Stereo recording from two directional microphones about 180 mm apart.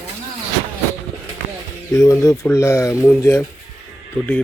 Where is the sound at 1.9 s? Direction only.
15° left (ahead or behind).